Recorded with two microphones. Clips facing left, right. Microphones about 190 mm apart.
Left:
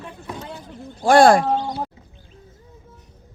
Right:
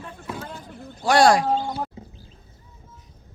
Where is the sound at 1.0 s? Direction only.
50° left (ahead or behind).